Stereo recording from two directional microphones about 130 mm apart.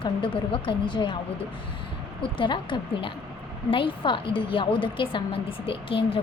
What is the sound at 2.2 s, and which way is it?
A woman's voice, 40° left (ahead or behind).